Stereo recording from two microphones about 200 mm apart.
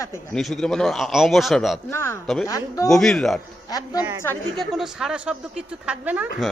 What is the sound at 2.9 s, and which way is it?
Speech, centre (ahead or behind).